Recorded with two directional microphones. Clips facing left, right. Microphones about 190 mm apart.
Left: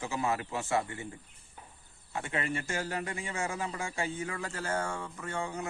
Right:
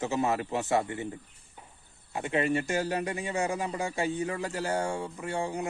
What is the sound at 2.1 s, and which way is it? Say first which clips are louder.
Speech: right 7 dB; 15° right (ahead or behind).